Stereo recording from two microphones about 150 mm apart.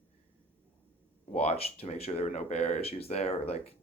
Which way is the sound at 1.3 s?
45° left (ahead or behind).